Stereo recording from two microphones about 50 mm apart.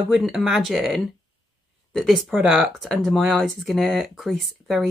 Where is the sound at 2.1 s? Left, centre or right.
Centre.